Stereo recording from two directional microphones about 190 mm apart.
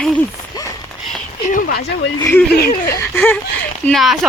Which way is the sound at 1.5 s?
45° left (ahead or behind).